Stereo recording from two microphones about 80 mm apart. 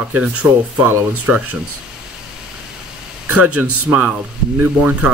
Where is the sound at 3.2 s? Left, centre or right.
Centre.